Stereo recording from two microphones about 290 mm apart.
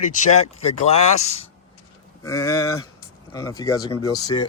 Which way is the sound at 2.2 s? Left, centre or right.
Centre.